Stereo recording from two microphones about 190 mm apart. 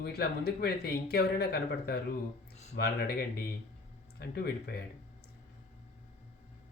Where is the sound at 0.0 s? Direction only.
55° left (ahead or behind).